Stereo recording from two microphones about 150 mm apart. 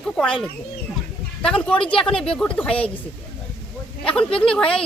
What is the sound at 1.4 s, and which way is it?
Speech, 5° left (ahead or behind).